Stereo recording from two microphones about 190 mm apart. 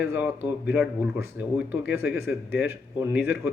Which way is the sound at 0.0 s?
10° right (ahead or behind).